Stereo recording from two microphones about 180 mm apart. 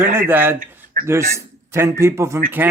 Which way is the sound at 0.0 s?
10° right (ahead or behind).